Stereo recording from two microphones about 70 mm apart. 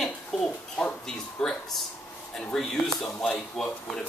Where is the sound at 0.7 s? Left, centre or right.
Centre.